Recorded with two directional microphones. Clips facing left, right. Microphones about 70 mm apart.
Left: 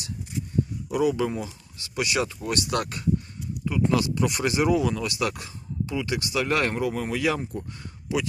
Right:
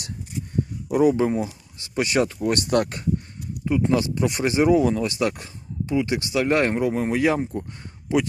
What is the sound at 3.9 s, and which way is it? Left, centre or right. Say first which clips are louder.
Speech: left 1 dB; right.